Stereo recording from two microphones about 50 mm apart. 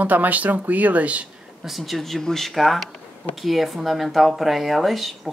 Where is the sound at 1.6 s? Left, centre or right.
Centre.